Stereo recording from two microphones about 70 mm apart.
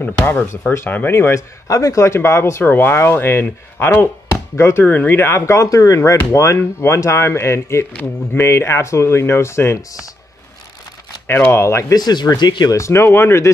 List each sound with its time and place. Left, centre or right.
0.0 s speech: left
0.5 s speech: left
0.8 s speech: left
1.1 s speech: left
1.7 s speech: left
2.6 s speech: left
4.8 s speech: left
7.9 s speech: left
8.4 s speech: left
11.2 s speech: left
11.5 s speech: left
11.9 s speech: left
12.7 s speech: left